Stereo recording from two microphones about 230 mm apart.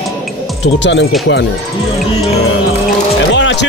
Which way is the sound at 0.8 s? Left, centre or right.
Left.